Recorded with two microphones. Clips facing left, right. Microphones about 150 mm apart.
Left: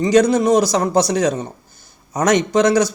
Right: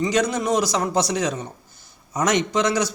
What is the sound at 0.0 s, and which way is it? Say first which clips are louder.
A man's voice: left 8 dB; 40° left (ahead or behind).